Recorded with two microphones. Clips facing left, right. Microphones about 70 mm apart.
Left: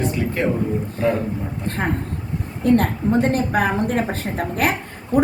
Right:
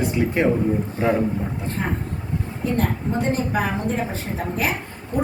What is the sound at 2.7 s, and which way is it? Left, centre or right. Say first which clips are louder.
A woman's voice: left 4 dB; left.